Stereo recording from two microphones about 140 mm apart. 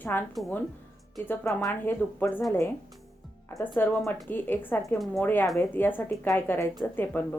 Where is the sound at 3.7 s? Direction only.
15° left (ahead or behind).